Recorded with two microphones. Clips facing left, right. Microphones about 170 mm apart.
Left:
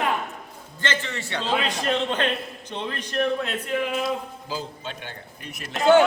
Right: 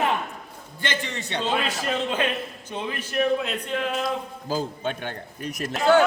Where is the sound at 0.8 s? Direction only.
15° right (ahead or behind).